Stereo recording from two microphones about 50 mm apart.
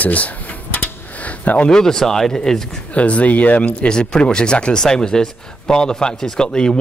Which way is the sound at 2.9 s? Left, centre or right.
Left.